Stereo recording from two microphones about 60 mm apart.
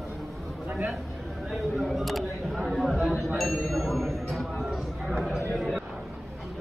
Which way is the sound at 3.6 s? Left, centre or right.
Centre.